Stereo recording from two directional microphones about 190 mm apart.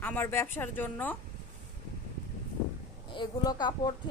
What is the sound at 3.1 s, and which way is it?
Speech, 20° left (ahead or behind).